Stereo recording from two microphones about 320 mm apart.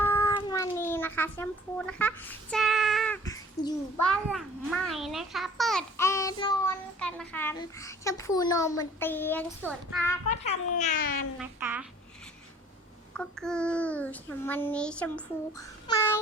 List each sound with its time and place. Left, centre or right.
0.0 s cat: centre
1.9 s child singing: centre
4.0 s a child's voice: centre
10.2 s a child's voice: left
11.3 s a child's voice: centre
13.1 s a child's voice: centre